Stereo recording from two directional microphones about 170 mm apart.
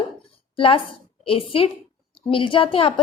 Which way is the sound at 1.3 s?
35° left (ahead or behind).